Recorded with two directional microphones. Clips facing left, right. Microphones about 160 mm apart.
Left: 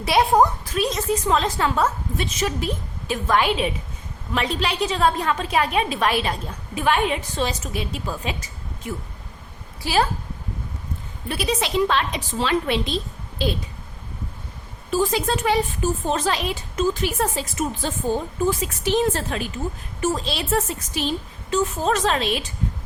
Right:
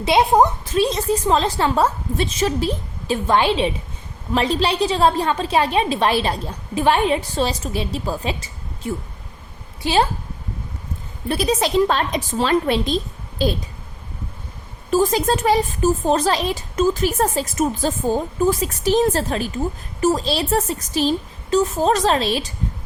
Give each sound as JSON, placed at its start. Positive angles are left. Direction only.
{"t": 0.0, "sound": "a woman's voice", "side_deg": -20}
{"t": 11.3, "sound": "speech", "side_deg": -40}
{"t": 14.8, "sound": "speech", "side_deg": -45}